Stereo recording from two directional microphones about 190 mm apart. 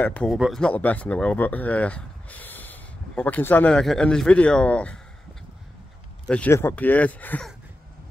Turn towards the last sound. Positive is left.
turn(degrees=5)  # may be behind; listen again after turning